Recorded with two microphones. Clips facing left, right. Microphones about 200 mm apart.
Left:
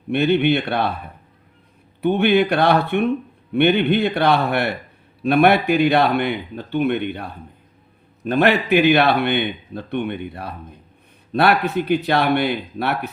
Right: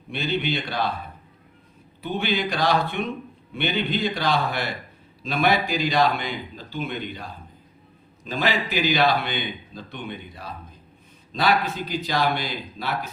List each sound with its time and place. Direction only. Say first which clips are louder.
0.1 s speech: left 10 dB; 60° left (ahead or behind)
2.0 s speech: left 10 dB; 60° left (ahead or behind)